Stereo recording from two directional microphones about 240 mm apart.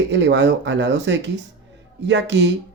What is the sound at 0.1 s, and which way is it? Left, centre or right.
Speech, right.